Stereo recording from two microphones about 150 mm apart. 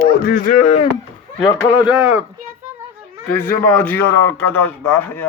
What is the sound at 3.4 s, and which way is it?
A man's voice, 15° left (ahead or behind).